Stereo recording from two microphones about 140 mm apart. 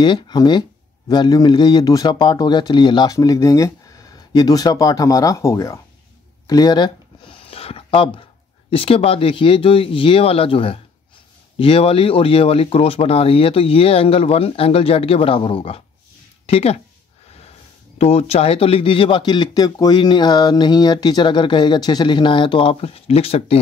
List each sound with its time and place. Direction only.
0.0 s speech: 30° left (ahead or behind)
6.4 s a sound: 25° left (ahead or behind)
8.6 s speech: 40° left (ahead or behind)
17.9 s speech: 45° left (ahead or behind)